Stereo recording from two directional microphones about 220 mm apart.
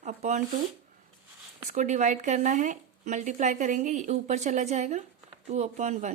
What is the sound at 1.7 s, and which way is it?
Speech, 35° right (ahead or behind).